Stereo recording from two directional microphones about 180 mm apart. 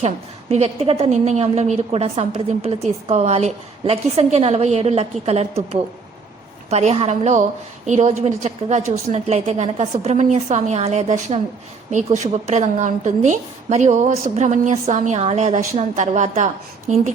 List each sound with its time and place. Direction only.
0.0 s a woman's voice: 35° right (ahead or behind)
6.7 s a woman's voice: 35° right (ahead or behind)